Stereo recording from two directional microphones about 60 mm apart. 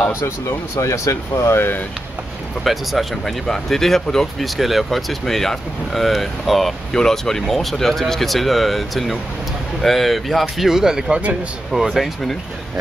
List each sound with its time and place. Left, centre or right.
0.7 s speech: left
1.5 s speech: left
2.6 s speech: centre
11.7 s speech: centre